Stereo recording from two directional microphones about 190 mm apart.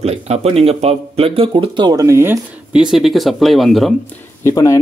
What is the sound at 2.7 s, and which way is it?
Speech, centre (ahead or behind).